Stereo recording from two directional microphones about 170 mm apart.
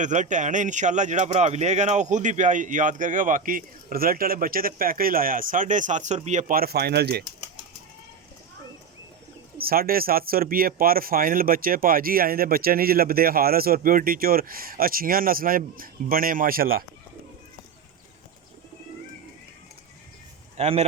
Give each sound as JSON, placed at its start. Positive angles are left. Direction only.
{"t": 0.0, "sound": "speech", "side_deg": -45}
{"t": 6.5, "sound": "speech", "side_deg": -65}
{"t": 9.6, "sound": "speech", "side_deg": -60}
{"t": 20.6, "sound": "speech", "side_deg": -40}